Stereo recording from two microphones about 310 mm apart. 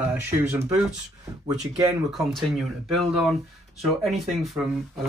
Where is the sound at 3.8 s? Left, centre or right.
Centre.